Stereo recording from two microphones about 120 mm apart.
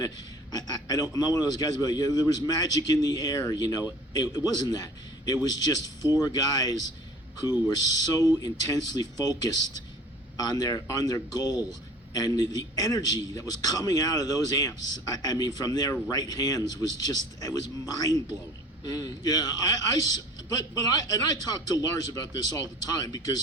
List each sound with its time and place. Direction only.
0.5 s a man's voice: 30° left (ahead or behind)